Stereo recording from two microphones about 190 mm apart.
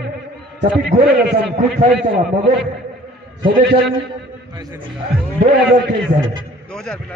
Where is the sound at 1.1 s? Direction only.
60° right (ahead or behind).